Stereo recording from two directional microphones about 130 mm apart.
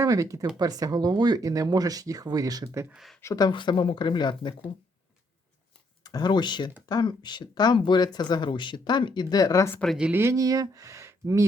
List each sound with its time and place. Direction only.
0.0 s speech: 25° right (ahead or behind)
2.9 s speech: centre (ahead or behind)
3.2 s speech: 25° left (ahead or behind)
6.0 s speech: 30° left (ahead or behind)
9.8 s speech: centre (ahead or behind)
10.1 s speech: 20° right (ahead or behind)